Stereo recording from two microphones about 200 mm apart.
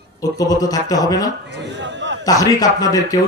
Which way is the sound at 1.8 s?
65° right (ahead or behind).